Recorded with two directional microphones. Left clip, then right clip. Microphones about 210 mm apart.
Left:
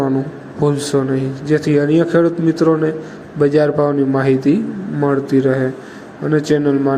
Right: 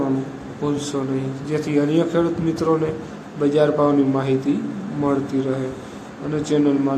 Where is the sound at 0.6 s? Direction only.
30° left (ahead or behind).